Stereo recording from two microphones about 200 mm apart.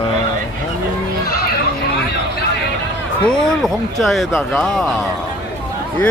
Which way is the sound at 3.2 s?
Centre (ahead or behind).